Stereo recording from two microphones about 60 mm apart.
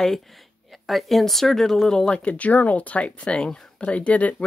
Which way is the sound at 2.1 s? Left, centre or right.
Left.